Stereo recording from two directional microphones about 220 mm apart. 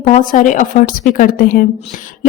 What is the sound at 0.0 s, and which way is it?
A woman's voice, 35° left (ahead or behind).